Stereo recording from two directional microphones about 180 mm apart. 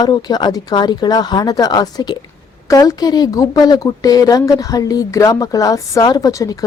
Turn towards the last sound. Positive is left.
turn(degrees=20)  # may be behind; listen again after turning